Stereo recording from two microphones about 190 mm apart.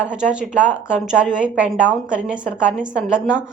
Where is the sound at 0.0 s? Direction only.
5° right (ahead or behind).